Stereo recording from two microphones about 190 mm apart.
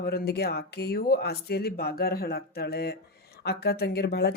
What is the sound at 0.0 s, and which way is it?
Speech, 55° left (ahead or behind).